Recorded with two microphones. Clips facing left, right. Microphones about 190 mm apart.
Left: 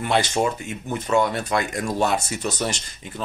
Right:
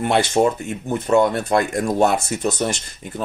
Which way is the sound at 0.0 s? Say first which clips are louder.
Right 4 dB; 60° right (ahead or behind).